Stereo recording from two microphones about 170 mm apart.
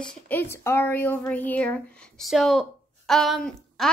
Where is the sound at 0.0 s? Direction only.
10° left (ahead or behind).